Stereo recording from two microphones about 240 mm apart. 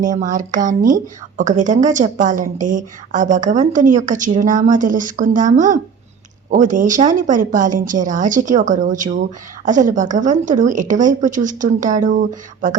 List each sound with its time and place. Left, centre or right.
0.0 s a woman's voice: right